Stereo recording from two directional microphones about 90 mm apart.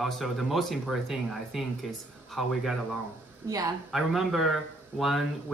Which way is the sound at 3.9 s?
5° right (ahead or behind).